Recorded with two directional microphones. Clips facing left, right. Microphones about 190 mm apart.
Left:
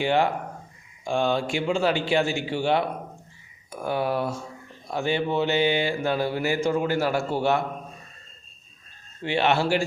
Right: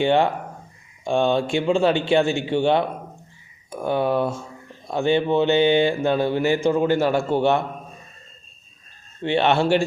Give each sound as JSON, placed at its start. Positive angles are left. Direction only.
{"t": 0.0, "sound": "speech", "side_deg": -25}
{"t": 9.2, "sound": "speech", "side_deg": -25}